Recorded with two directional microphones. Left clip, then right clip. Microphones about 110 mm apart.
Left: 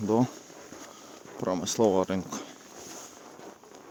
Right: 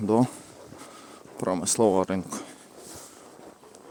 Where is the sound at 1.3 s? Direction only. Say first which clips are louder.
Right 2 dB; 25° right (ahead or behind).